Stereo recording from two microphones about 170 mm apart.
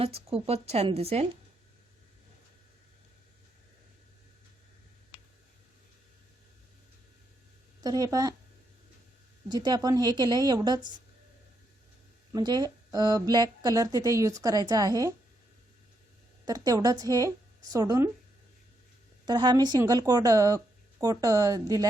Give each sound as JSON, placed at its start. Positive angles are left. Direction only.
{"t": 0.0, "sound": "speech", "side_deg": -35}
{"t": 7.8, "sound": "speech", "side_deg": -20}
{"t": 9.5, "sound": "speech", "side_deg": -25}
{"t": 12.3, "sound": "speech", "side_deg": -25}
{"t": 16.5, "sound": "speech", "side_deg": -20}
{"t": 19.2, "sound": "speech", "side_deg": -25}